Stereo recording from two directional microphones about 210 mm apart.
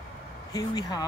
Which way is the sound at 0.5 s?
20° left (ahead or behind).